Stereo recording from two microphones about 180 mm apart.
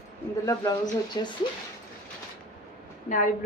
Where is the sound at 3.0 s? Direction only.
45° left (ahead or behind).